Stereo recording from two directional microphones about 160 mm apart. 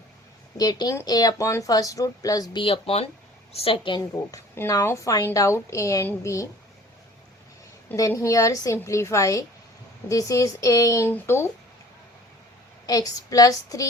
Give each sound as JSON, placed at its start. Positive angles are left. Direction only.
{"t": 0.5, "sound": "a woman's voice", "side_deg": 25}
{"t": 4.5, "sound": "speech", "side_deg": 15}
{"t": 7.9, "sound": "speech", "side_deg": 20}
{"t": 12.8, "sound": "speech", "side_deg": 25}